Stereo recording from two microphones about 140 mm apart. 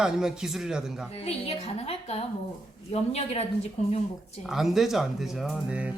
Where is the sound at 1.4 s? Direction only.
45° left (ahead or behind).